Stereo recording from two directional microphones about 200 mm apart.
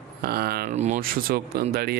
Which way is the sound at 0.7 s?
35° right (ahead or behind).